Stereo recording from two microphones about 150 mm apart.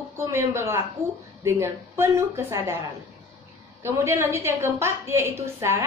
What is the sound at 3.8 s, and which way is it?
A woman's voice, 15° right (ahead or behind).